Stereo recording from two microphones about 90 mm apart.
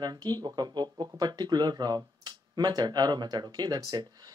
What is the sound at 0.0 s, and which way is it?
Speech, 50° right (ahead or behind).